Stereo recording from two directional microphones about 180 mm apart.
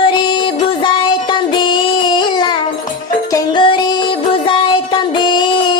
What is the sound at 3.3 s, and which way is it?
Music, 25° left (ahead or behind).